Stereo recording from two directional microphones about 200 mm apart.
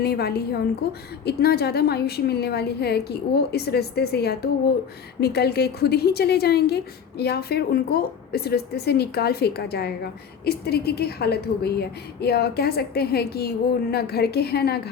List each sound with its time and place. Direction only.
0.0 s a woman's voice: 50° left (ahead or behind)